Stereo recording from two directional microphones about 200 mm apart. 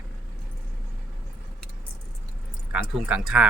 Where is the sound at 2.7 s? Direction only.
5° right (ahead or behind).